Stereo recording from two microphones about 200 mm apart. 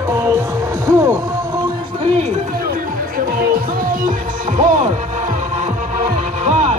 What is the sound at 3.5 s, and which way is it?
Music, 45° right (ahead or behind).